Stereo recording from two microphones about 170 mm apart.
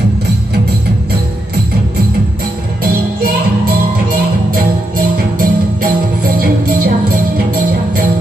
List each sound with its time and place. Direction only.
2.8 s music: 60° right (ahead or behind)
4.5 s music: 60° right (ahead or behind)